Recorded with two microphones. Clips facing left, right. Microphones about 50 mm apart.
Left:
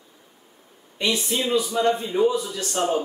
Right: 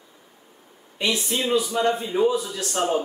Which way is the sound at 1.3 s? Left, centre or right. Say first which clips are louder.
Even; centre.